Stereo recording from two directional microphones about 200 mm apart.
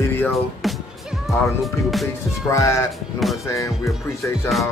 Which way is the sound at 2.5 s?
15° left (ahead or behind).